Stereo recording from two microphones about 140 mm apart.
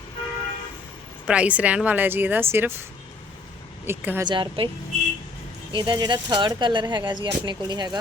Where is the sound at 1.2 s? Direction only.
10° right (ahead or behind).